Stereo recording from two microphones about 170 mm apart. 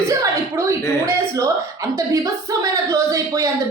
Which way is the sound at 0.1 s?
20° right (ahead or behind).